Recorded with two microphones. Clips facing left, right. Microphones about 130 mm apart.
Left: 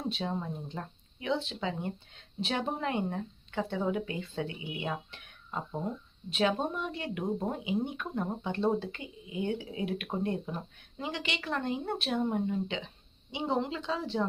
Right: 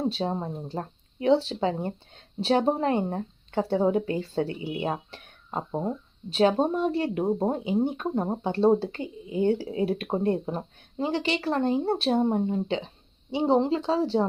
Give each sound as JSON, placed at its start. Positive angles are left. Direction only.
{"t": 0.0, "sound": "speech", "side_deg": -35}